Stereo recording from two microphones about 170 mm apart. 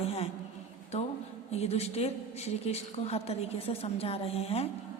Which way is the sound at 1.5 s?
40° left (ahead or behind).